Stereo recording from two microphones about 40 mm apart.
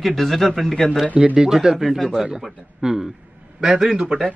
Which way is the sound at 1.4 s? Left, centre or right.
Centre.